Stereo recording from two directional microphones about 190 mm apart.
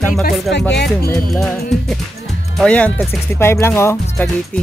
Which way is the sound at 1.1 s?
Centre (ahead or behind).